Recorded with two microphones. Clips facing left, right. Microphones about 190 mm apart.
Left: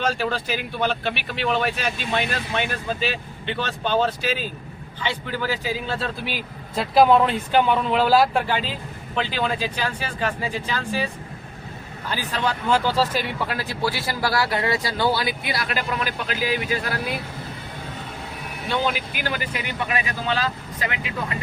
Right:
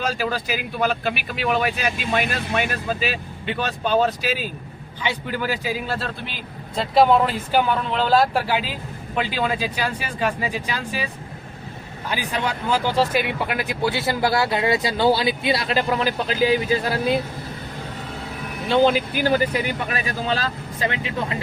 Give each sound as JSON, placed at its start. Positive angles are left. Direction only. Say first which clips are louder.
{"t": 0.0, "sound": "speech", "louder": "even", "side_deg": -10}
{"t": 6.7, "sound": "speech", "louder": "even", "side_deg": 0}
{"t": 12.1, "sound": "speech", "louder": "even", "side_deg": -15}
{"t": 19.3, "sound": "speech", "louder": "right 9 dB", "side_deg": -35}